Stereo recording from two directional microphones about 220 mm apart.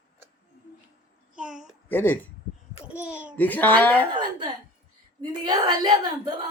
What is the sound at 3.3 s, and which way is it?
Speech, 10° left (ahead or behind).